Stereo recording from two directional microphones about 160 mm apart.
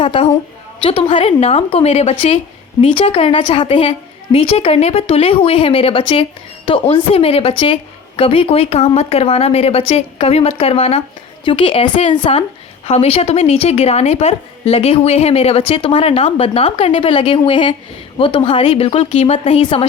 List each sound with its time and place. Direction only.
0.0 s a woman's voice: 35° left (ahead or behind)